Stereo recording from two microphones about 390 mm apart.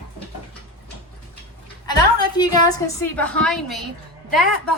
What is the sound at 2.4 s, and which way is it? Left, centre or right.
A woman's voice, centre.